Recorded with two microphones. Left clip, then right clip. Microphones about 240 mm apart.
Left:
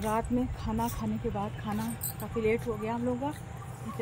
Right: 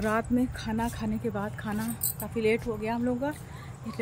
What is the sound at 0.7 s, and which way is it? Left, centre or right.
Speech, centre.